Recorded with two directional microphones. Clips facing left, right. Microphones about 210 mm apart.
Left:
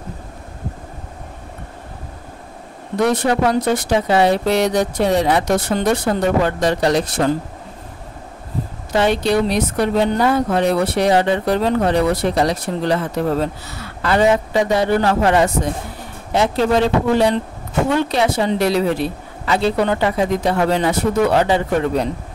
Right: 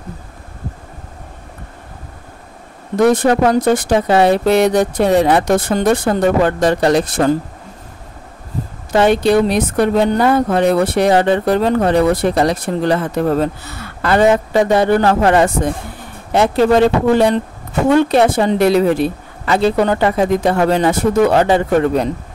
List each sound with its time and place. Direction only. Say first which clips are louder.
3.0 s speech: right 5 dB; 45° right (ahead or behind)
8.9 s speech: right 4 dB; 50° right (ahead or behind)